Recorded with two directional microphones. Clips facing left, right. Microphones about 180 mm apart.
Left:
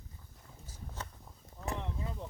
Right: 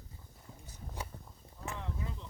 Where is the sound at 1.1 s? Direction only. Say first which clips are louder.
Right 4 dB; 65° right (ahead or behind).